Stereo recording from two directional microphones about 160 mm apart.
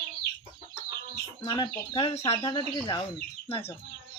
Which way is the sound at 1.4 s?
25° left (ahead or behind).